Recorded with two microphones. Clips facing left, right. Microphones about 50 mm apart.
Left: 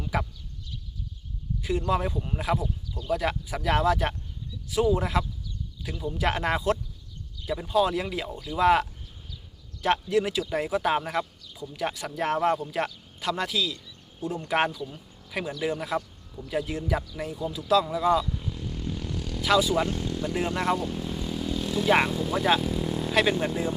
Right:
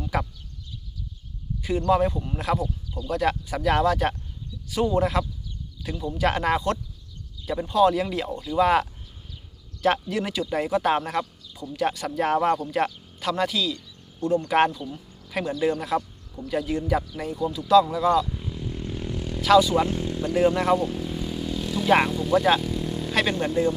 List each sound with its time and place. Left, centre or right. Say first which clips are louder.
0.0 s a sound: right 2 dB; centre
1.9 s speech: right 8 dB; centre
18.3 s vehicle: right 1 dB; centre
19.4 s speech: right 6 dB; centre
19.9 s vehicle: right 3 dB; right
20.2 s vehicle: right 6 dB; centre